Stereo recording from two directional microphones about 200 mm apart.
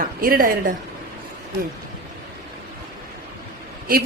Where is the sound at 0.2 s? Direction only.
45° right (ahead or behind).